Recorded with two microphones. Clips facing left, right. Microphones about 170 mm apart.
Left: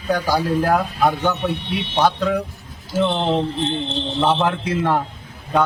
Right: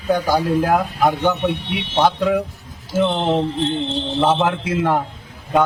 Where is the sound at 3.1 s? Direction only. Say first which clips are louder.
Right 1 dB; 5° right (ahead or behind).